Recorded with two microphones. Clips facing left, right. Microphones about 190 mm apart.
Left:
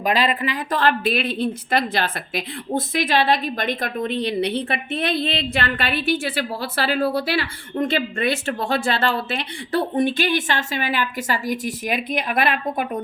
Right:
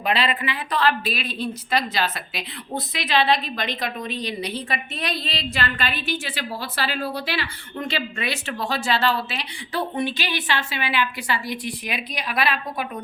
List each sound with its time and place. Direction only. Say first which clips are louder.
0.0 s a woman's voice: left 3 dB; 40° left (ahead or behind)